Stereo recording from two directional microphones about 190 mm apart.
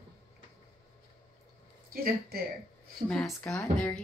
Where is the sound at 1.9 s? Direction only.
55° right (ahead or behind).